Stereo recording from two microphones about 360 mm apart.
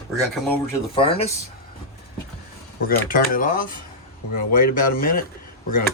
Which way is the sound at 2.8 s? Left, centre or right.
Left.